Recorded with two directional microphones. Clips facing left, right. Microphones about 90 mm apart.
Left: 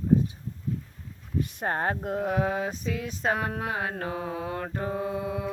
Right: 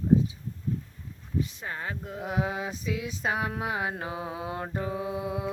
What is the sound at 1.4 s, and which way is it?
Speech, 50° left (ahead or behind).